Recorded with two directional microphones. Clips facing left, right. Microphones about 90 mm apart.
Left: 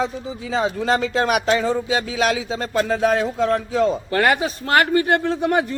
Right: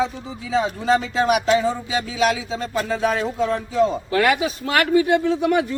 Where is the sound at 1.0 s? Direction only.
55° left (ahead or behind).